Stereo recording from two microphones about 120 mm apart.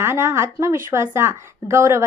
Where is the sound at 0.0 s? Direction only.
20° right (ahead or behind).